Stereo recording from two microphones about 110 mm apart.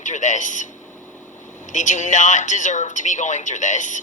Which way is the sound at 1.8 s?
90° left.